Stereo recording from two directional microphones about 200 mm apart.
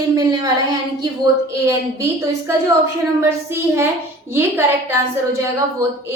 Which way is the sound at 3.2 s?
10° right (ahead or behind).